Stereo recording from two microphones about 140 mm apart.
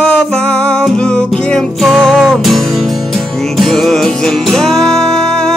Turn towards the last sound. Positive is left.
turn(degrees=5)  # may be behind; listen again after turning